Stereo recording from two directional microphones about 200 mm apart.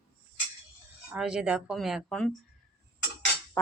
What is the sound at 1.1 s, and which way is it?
Speech, 5° right (ahead or behind).